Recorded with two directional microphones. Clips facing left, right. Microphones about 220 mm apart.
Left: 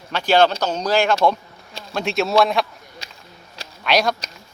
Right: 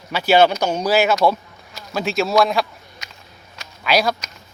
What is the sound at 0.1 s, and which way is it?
A man's voice, 10° right (ahead or behind).